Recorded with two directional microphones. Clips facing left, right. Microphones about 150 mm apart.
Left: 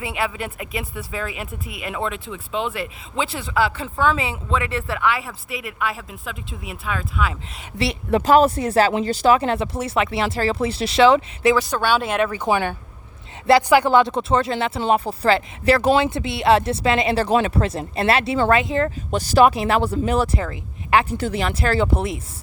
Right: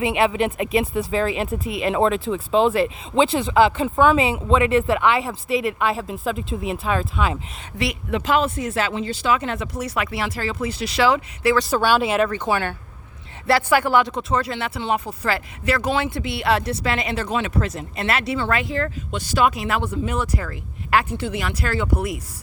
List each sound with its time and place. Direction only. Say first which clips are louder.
0.0 s speech: right 7 dB; 20° right (ahead or behind)
7.8 s speech: left 4 dB; 35° left (ahead or behind)
11.7 s speech: right 2 dB; 5° right (ahead or behind)
12.3 s speech: left 2 dB; 15° left (ahead or behind)
19.1 s speech: left 5 dB; 40° left (ahead or behind); by 21.1 s 20° left (ahead or behind)
21.1 s speech: left 3 dB; 35° left (ahead or behind)